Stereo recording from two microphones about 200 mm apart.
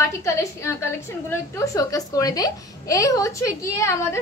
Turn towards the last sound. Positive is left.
turn(degrees=15)  # may be behind; listen again after turning